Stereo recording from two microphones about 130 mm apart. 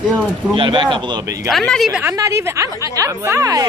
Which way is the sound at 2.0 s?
25° right (ahead or behind).